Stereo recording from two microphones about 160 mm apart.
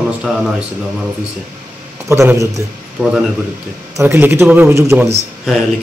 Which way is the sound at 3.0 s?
5° right (ahead or behind).